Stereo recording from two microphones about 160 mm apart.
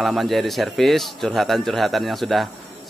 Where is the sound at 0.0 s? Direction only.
Centre (ahead or behind).